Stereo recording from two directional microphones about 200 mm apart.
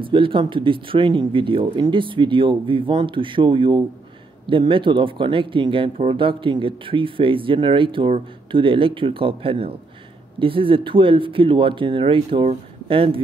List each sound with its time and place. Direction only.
0.0 s speech: 25° right (ahead or behind)